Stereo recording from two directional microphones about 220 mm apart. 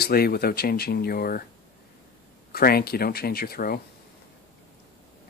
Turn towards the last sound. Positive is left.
turn(degrees=45)  # may be behind; listen again after turning